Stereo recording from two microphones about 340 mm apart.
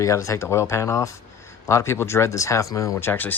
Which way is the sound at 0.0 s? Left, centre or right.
Centre.